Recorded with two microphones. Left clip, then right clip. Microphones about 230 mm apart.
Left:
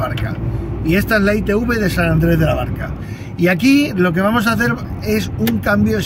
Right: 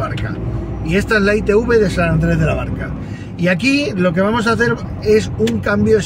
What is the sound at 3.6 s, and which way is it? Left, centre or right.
Speech, centre.